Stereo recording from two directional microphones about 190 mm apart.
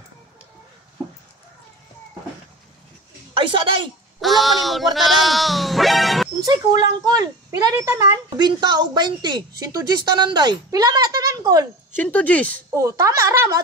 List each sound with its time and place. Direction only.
3.3 s a woman's voice: 25° right (ahead or behind)
4.2 s speech: centre (ahead or behind)
6.4 s a woman's voice: 20° right (ahead or behind)
12.0 s speech: 10° left (ahead or behind)
12.7 s speech: 15° right (ahead or behind)